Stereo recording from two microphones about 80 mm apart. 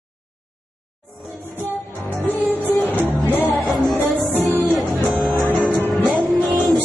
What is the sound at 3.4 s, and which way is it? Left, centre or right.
Music, centre.